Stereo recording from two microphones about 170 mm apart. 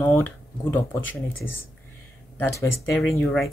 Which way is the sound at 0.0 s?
10° left (ahead or behind).